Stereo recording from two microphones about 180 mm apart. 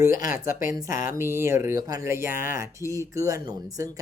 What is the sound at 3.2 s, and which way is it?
Speech, 15° right (ahead or behind).